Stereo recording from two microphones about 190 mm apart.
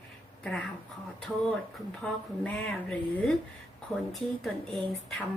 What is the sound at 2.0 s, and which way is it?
A woman's voice, 5° left (ahead or behind).